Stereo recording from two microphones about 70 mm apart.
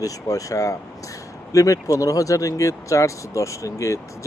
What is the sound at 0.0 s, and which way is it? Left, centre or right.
Speech, left.